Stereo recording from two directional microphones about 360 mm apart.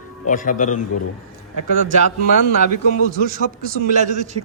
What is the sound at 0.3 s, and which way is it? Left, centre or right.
Speech, left.